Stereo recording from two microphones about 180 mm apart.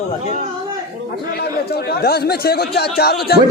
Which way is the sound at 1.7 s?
60° left (ahead or behind).